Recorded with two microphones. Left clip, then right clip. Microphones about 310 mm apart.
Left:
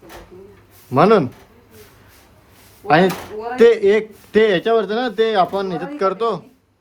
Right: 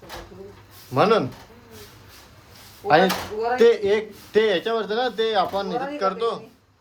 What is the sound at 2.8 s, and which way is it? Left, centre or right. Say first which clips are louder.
Speech: left 3 dB; left.